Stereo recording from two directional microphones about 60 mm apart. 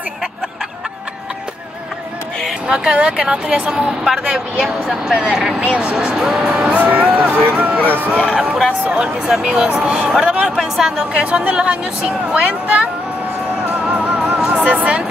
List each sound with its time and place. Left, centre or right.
2.7 s speech: centre
6.7 s speech: right
8.9 s speech: centre
11.1 s speech: centre
13.6 s music: centre
14.7 s speech: right